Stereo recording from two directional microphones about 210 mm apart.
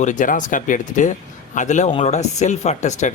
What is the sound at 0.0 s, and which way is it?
Speech, 35° left (ahead or behind).